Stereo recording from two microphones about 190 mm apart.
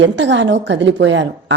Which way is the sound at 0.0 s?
70° right (ahead or behind).